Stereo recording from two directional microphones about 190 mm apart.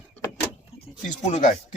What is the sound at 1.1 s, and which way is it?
Speech, 40° left (ahead or behind).